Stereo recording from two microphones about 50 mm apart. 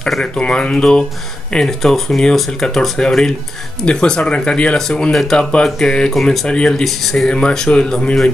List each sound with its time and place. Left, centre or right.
0.2 s speech: centre
4.7 s speech: centre
6.8 s speech: centre
7.2 s speech: centre